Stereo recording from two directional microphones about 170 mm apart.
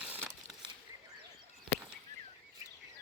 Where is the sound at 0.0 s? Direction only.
10° right (ahead or behind).